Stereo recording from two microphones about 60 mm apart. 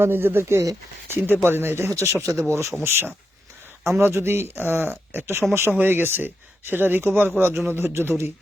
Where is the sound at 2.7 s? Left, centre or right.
Right.